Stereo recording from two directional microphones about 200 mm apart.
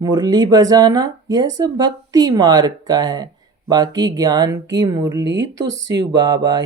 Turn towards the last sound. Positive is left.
turn(degrees=-20)  # may be behind; listen again after turning